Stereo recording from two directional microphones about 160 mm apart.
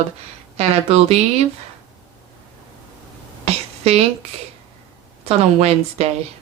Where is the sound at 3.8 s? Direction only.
40° right (ahead or behind).